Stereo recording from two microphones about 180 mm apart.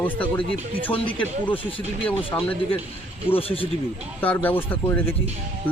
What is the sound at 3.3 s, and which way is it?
Speech, 30° left (ahead or behind).